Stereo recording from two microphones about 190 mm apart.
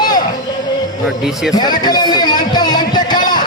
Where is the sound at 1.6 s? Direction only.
20° left (ahead or behind).